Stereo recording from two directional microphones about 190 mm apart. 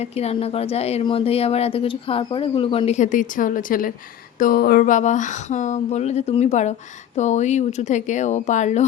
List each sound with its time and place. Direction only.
0.0 s speech: 35° left (ahead or behind)